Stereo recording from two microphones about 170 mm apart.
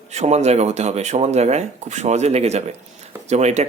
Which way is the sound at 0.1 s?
40° right (ahead or behind).